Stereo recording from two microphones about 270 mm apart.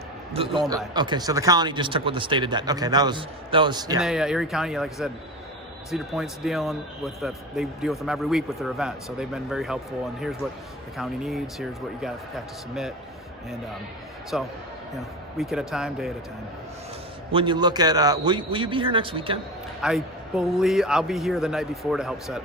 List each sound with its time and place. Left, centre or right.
0.9 s speech: centre
4.0 s a man's voice: centre
14.3 s a man's voice: centre
17.3 s speech: centre
19.8 s a man's voice: centre